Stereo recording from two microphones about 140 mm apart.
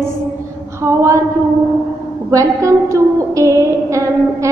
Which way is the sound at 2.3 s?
20° right (ahead or behind).